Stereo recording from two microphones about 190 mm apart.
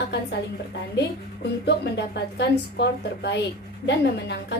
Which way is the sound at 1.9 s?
65° left (ahead or behind).